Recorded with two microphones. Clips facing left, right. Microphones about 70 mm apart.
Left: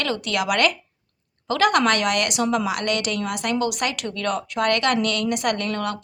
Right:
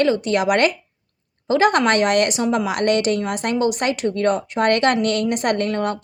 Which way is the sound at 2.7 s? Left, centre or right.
Right.